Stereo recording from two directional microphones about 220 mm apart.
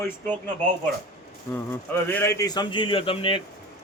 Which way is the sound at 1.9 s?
10° left (ahead or behind).